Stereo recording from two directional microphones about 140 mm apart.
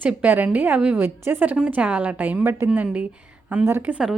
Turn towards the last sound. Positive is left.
turn(degrees=-5)  # may be behind; listen again after turning